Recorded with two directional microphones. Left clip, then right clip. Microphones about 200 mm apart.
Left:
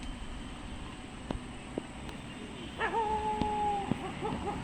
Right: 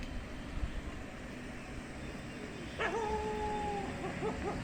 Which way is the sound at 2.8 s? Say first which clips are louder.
Left 2 dB; 60° right (ahead or behind).